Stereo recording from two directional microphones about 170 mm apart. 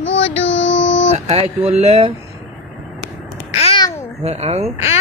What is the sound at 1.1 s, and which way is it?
Speech, 40° right (ahead or behind).